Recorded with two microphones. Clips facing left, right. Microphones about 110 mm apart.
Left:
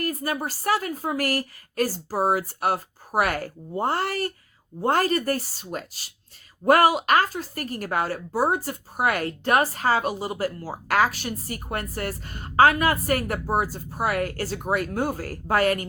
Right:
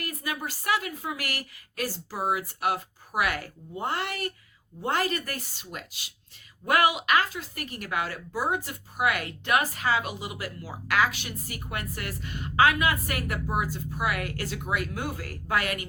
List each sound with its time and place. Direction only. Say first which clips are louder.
0.0 s a woman's voice: left 6 dB; 40° left (ahead or behind)